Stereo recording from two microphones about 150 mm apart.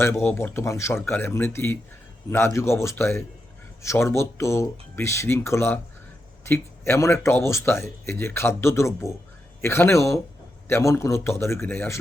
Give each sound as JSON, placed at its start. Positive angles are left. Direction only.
{"t": 0.0, "sound": "speech", "side_deg": 15}